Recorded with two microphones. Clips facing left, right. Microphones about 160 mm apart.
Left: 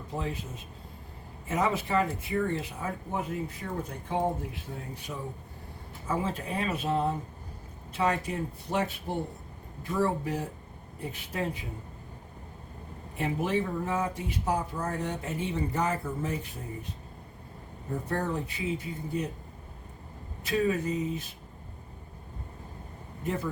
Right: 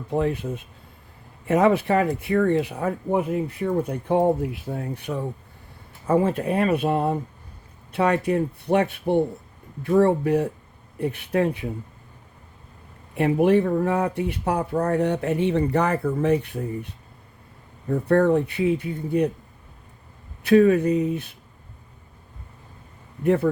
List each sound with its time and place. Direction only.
0.1 s speech: 60° right (ahead or behind)
13.1 s speech: 60° right (ahead or behind)
20.4 s speech: 65° right (ahead or behind)
23.2 s speech: 65° right (ahead or behind)